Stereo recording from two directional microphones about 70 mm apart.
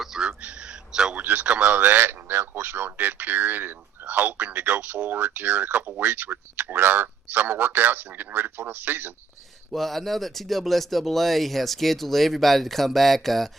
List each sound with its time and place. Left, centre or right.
0.0 s a sound: centre
1.1 s speech: right
9.7 s speech: centre